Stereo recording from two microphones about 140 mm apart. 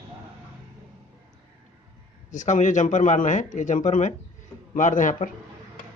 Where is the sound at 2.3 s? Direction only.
60° left (ahead or behind).